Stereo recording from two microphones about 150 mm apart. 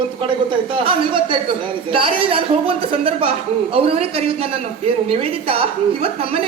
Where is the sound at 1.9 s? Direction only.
35° right (ahead or behind).